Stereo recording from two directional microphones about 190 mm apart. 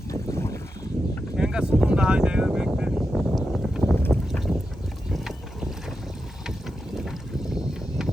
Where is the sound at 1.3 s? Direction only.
5° right (ahead or behind).